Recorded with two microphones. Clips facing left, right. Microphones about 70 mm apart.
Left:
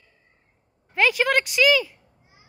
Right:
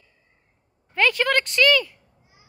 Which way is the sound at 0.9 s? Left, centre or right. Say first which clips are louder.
Even; centre.